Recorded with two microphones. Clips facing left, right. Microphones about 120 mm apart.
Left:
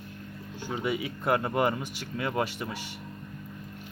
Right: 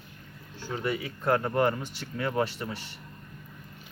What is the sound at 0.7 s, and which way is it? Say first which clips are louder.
Speech: left 1 dB; 10° left (ahead or behind).